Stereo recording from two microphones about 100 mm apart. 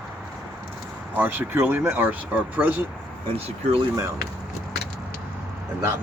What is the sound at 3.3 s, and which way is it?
Speech, 80° right.